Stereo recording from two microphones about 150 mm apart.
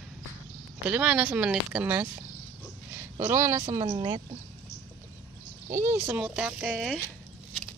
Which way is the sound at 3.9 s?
35° right (ahead or behind).